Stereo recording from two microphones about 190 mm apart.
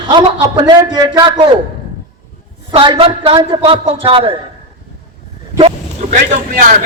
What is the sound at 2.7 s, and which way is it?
A man's voice, 25° right (ahead or behind).